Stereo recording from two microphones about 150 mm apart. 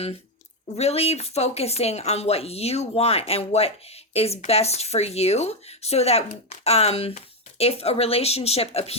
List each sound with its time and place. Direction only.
0.8 s a woman's voice: 45° left (ahead or behind)